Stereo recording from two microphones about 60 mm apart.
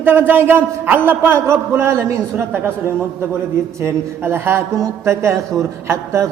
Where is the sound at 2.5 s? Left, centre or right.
Right.